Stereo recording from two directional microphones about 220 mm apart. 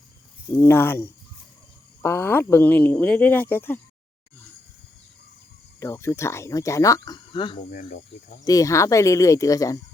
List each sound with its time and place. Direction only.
0.6 s speech: 10° left (ahead or behind)
5.8 s speech: 15° left (ahead or behind)
7.7 s speech: 35° left (ahead or behind)
8.4 s speech: 15° left (ahead or behind)